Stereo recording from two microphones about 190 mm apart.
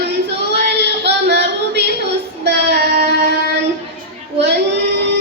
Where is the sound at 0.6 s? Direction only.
60° right (ahead or behind).